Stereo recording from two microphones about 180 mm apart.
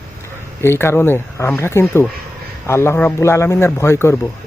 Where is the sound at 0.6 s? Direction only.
15° left (ahead or behind).